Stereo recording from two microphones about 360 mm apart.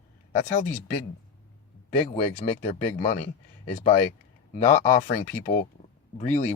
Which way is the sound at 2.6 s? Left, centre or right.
Centre.